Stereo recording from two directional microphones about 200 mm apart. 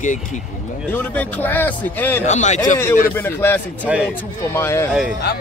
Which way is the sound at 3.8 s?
5° right (ahead or behind).